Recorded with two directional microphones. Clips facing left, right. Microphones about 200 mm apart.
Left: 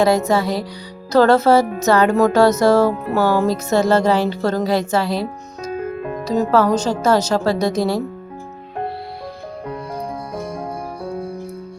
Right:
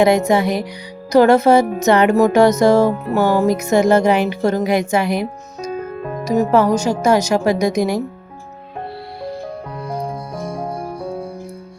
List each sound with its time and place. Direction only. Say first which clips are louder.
0.0 s music: right 2 dB; 15° right (ahead or behind)